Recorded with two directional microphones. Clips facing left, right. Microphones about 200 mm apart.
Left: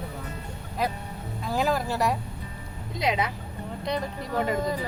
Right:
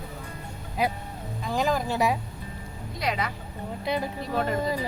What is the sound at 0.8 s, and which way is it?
Speech, 5° right (ahead or behind).